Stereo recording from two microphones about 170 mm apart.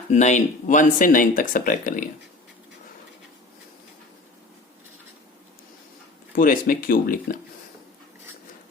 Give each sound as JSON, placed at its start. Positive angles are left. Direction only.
{"t": 0.1, "sound": "speech", "side_deg": 45}
{"t": 6.3, "sound": "speech", "side_deg": 55}